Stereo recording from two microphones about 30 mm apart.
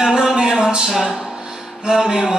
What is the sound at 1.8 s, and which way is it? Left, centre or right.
Music, right.